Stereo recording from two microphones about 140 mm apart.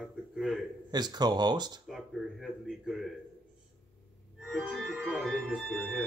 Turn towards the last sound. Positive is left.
turn(degrees=5)  # may be behind; listen again after turning